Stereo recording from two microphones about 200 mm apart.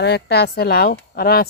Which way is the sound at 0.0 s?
55° left (ahead or behind).